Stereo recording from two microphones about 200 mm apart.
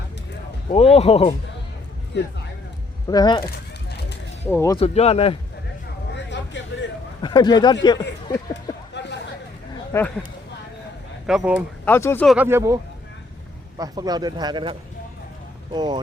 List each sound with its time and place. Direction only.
0.7 s speech: 30° left (ahead or behind)
2.1 s speech: 60° left (ahead or behind)
3.1 s speech: 20° left (ahead or behind)
3.8 s a sound: 55° left (ahead or behind)
4.5 s speech: 15° left (ahead or behind)
4.8 s speech: 30° left (ahead or behind)
6.1 s vehicle: 60° left (ahead or behind)
7.2 s speech: 20° left (ahead or behind)
8.9 s a sound: 60° left (ahead or behind)
9.9 s speech: 10° left (ahead or behind)
11.3 s speech: 5° right (ahead or behind)
11.9 s speech: 10° left (ahead or behind)
12.2 s speech: centre (ahead or behind)
12.5 s a man's voice: 15° right (ahead or behind)